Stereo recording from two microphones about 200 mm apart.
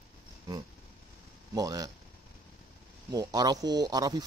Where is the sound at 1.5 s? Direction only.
15° right (ahead or behind).